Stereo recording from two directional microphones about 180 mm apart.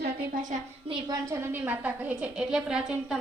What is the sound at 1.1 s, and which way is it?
A woman's voice, 15° right (ahead or behind).